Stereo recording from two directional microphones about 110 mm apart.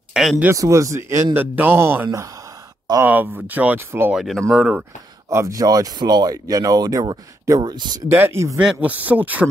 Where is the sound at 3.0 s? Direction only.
15° right (ahead or behind).